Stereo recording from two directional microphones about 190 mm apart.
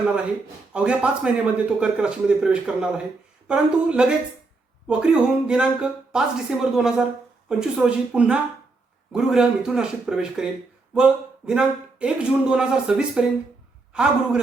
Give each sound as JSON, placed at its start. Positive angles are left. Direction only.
{"t": 0.7, "sound": "speech", "side_deg": -5}